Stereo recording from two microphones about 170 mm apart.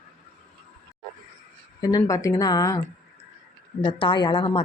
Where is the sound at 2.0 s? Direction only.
15° left (ahead or behind).